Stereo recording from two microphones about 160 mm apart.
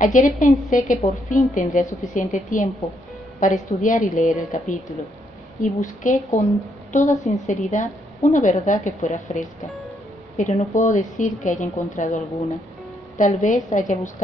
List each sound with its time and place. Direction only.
0.0 s a woman's voice: 55° left (ahead or behind)